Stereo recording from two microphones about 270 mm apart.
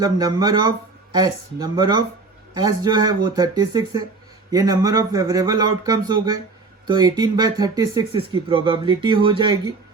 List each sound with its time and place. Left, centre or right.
0.0 s speech: centre